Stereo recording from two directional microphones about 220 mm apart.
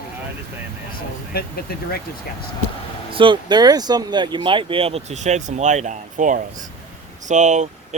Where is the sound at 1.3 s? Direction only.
45° left (ahead or behind).